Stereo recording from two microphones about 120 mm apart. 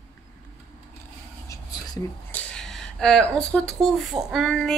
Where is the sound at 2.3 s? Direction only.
5° left (ahead or behind).